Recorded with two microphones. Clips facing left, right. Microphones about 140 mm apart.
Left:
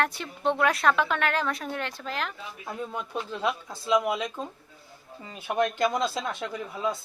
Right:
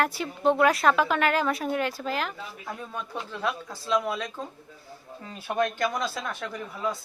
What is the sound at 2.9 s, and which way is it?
Speech, 20° left (ahead or behind).